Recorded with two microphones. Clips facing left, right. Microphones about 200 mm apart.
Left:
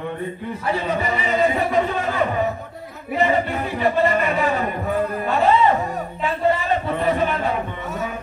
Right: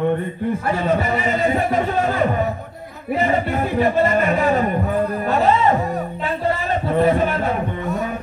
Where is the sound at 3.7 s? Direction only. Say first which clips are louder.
Right 1 dB; 45° right (ahead or behind).